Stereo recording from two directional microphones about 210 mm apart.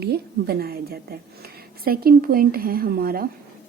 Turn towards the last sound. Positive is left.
turn(degrees=-45)  # may be behind; listen again after turning